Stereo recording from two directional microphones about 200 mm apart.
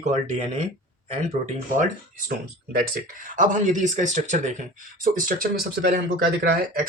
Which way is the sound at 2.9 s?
40° right (ahead or behind).